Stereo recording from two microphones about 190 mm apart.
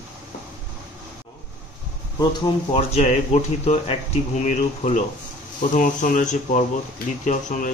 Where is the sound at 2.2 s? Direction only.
25° left (ahead or behind); by 7.7 s 45° left (ahead or behind).